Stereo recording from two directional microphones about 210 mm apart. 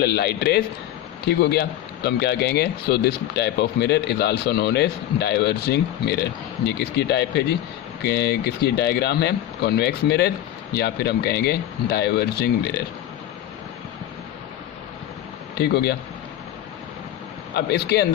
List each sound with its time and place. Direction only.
0.0 s speech: 50° left (ahead or behind)
15.5 s speech: 50° left (ahead or behind)
17.5 s speech: 50° left (ahead or behind)